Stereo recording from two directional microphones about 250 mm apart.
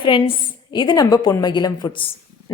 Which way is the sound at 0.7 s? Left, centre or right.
Centre.